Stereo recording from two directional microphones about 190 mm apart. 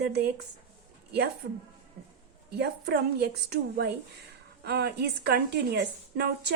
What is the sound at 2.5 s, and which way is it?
A woman's voice, 60° right (ahead or behind).